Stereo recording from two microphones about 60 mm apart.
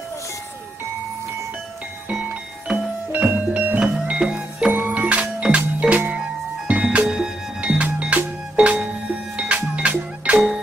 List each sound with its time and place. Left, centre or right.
2.7 s music: right
3.8 s music: centre